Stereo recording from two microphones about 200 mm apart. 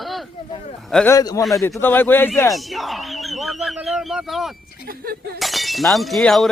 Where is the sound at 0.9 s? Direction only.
5° left (ahead or behind).